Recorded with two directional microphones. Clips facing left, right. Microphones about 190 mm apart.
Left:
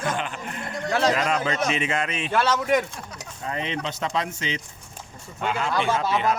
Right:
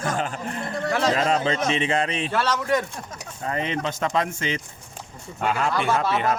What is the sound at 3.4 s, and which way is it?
Speech, 50° right (ahead or behind).